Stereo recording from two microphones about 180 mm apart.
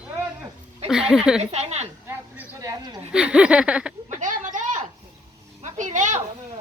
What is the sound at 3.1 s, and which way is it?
Speech, 5° right (ahead or behind).